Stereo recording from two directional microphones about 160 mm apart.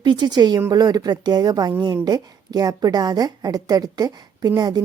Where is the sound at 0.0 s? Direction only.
30° right (ahead or behind).